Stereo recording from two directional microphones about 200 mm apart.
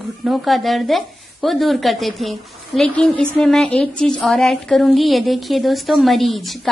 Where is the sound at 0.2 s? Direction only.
Centre (ahead or behind).